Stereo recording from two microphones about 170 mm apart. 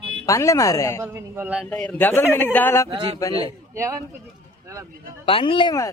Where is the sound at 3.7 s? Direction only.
15° right (ahead or behind).